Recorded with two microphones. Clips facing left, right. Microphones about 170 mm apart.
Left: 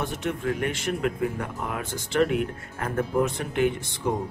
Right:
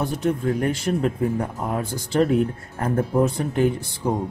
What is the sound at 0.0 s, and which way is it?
Speech, 35° right (ahead or behind).